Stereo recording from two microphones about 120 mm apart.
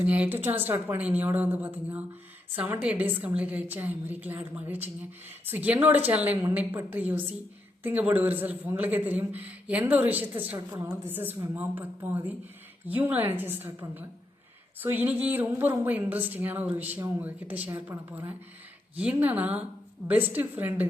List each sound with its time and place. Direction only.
0.0 s a man's voice: 15° right (ahead or behind)